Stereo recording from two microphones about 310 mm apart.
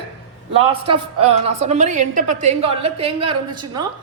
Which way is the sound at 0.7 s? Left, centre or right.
Centre.